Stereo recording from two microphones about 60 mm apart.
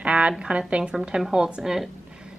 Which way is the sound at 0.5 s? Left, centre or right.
Centre.